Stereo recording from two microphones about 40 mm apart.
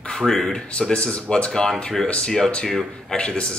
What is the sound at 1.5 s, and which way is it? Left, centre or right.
Speech, centre.